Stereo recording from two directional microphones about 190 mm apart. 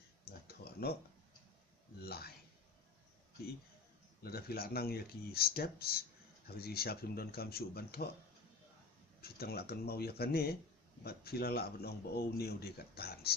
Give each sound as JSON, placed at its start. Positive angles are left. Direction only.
{"t": 0.4, "sound": "a sound", "side_deg": 55}
{"t": 2.0, "sound": "speech", "side_deg": 55}
{"t": 4.2, "sound": "speech", "side_deg": 55}
{"t": 9.2, "sound": "speech", "side_deg": 55}